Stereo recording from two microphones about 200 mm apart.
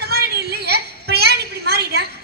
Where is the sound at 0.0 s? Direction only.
55° right (ahead or behind).